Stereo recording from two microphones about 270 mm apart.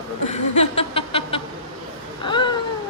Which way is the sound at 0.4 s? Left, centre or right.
Left.